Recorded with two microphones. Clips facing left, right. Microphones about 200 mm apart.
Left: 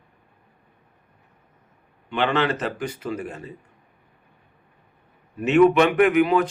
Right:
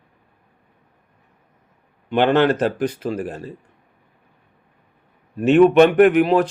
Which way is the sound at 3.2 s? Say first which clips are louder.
Right 5 dB; 35° right (ahead or behind).